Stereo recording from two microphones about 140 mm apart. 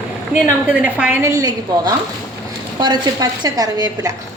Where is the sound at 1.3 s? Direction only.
25° right (ahead or behind).